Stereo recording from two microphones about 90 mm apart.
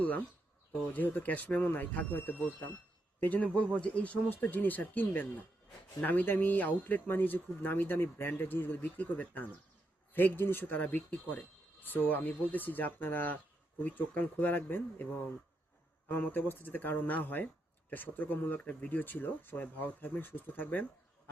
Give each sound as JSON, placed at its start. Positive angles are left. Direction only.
{"t": 0.9, "sound": "speech", "side_deg": 20}